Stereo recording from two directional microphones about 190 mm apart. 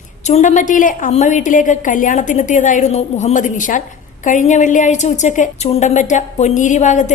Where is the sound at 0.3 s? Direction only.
40° left (ahead or behind).